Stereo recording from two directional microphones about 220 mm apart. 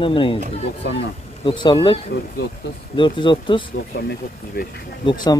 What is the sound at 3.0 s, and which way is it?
Speech, 20° left (ahead or behind).